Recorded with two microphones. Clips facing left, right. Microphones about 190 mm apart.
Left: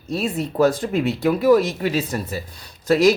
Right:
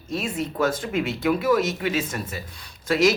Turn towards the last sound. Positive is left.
turn(degrees=35)  # may be behind; listen again after turning